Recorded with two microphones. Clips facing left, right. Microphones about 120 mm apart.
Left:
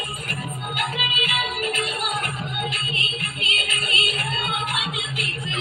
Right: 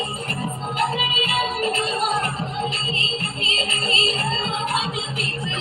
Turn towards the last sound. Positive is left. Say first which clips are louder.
# right 3 dB
turn(degrees=-30)  # may be behind; listen again after turning